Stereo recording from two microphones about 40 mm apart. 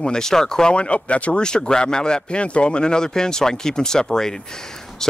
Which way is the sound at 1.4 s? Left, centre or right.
Centre.